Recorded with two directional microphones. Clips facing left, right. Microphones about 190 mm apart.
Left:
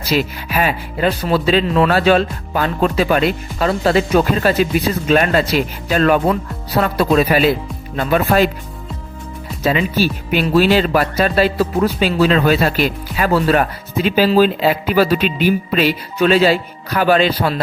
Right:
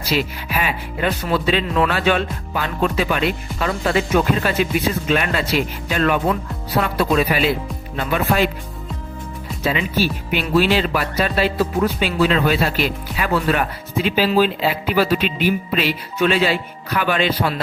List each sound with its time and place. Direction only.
0.1 s speech: 40° left (ahead or behind)
9.6 s speech: 40° left (ahead or behind)